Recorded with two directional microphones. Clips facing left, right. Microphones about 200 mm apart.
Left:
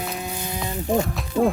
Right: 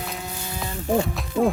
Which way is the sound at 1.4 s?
5° right (ahead or behind).